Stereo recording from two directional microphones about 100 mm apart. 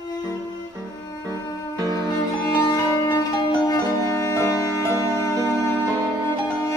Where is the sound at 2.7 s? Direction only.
40° left (ahead or behind).